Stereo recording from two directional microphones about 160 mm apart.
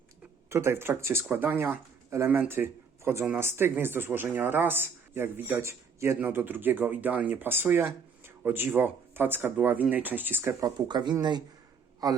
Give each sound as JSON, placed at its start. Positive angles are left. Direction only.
{"t": 0.5, "sound": "speech", "side_deg": -15}
{"t": 10.8, "sound": "speech", "side_deg": -25}